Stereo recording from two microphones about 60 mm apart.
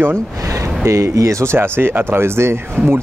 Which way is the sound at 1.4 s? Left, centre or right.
Right.